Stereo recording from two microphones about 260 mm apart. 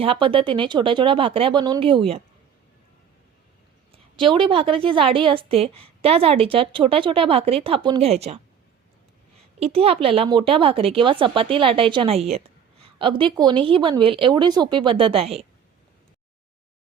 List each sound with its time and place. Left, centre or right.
0.0 s a woman's voice: right
3.9 s a woman's voice: centre
9.6 s a woman's voice: right